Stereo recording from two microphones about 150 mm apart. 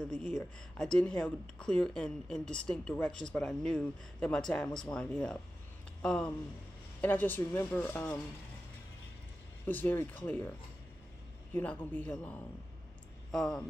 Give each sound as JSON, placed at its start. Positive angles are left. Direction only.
{"t": 0.1, "sound": "speech", "side_deg": -55}
{"t": 0.7, "sound": "speech", "side_deg": 5}
{"t": 9.7, "sound": "speech", "side_deg": 10}
{"t": 11.5, "sound": "speech", "side_deg": 10}